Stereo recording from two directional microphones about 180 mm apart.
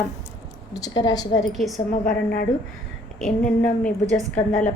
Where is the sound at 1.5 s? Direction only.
Centre (ahead or behind).